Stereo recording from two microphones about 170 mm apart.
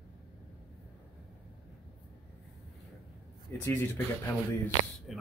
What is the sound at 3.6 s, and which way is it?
Speech, 15° left (ahead or behind).